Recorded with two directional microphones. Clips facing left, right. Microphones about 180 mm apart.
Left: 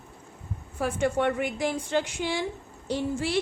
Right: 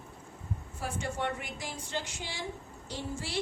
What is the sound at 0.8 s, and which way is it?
A woman's voice, 65° left (ahead or behind).